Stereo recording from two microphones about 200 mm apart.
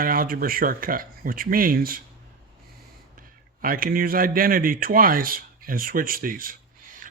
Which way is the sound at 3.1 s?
45° right (ahead or behind).